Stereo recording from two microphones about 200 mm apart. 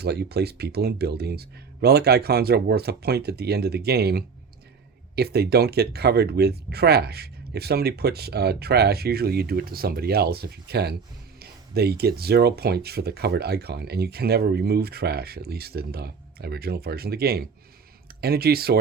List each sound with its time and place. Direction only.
0.0 s speech: 55° right (ahead or behind)